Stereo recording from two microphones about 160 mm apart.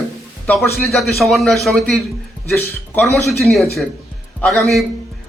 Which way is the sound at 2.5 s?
10° left (ahead or behind).